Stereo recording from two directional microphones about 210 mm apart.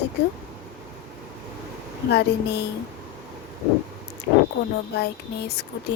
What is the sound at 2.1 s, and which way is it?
Speech, 50° left (ahead or behind).